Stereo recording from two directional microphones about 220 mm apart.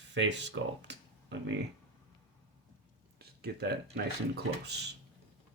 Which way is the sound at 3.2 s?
45° right (ahead or behind).